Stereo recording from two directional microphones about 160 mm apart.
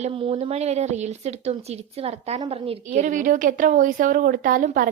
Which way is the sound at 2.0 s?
40° right (ahead or behind).